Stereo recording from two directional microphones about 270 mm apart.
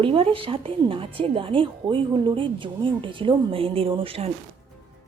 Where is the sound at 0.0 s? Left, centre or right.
Centre.